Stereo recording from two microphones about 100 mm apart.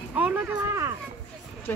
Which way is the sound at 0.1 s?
15° right (ahead or behind).